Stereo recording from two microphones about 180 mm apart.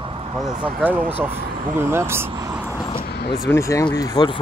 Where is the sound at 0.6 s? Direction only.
10° right (ahead or behind).